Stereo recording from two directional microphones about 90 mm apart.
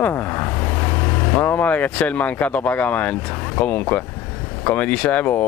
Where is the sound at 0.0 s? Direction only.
25° left (ahead or behind).